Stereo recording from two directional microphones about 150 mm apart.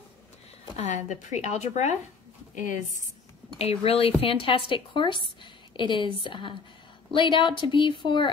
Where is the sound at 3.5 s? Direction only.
40° left (ahead or behind).